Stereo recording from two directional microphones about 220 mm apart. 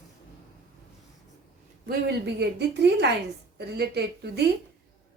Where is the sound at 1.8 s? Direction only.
50° right (ahead or behind).